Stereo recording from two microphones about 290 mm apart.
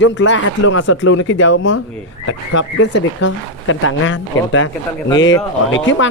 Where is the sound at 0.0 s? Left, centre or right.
Left.